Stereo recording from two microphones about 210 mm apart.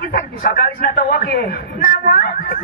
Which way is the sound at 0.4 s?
45° left (ahead or behind).